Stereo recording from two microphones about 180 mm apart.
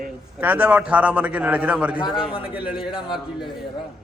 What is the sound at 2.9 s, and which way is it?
Speech, 25° left (ahead or behind).